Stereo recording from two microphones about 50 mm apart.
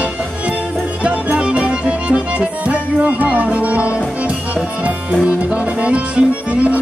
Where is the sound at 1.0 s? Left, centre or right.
Right.